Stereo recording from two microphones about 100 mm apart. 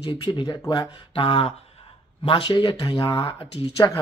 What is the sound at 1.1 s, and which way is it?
Speech, 65° left (ahead or behind).